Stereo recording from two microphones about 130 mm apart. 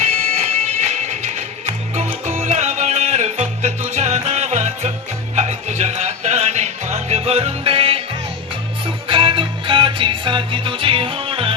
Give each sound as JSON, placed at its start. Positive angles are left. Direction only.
{"t": 0.0, "sound": "music", "side_deg": -60}
{"t": 9.0, "sound": "music", "side_deg": -40}